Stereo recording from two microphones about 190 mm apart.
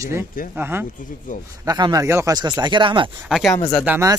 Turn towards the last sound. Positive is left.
turn(degrees=-10)  # may be behind; listen again after turning